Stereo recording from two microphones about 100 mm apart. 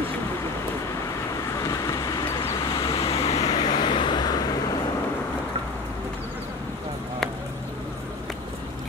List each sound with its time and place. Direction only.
1.6 s vehicle: 35° left (ahead or behind)
2.9 s vehicle: 75° left (ahead or behind)
3.5 s vehicle: 50° left (ahead or behind)